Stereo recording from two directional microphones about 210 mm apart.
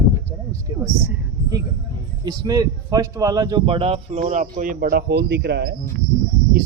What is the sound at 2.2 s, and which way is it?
Speech, 15° right (ahead or behind).